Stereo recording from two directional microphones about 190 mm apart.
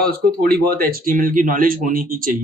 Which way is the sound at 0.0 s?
55° right (ahead or behind).